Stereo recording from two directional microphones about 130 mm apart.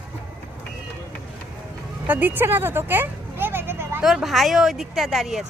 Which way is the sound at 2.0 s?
15° right (ahead or behind).